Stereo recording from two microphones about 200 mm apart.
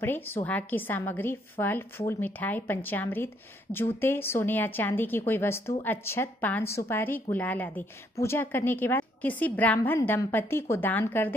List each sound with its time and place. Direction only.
0.0 s a woman's voice: 10° left (ahead or behind)